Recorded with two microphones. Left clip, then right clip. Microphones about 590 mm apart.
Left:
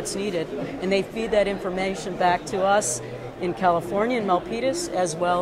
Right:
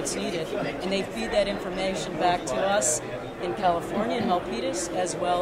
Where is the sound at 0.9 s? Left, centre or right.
Left.